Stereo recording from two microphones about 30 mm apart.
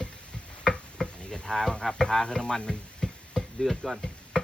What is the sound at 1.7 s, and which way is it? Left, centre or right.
Music, left.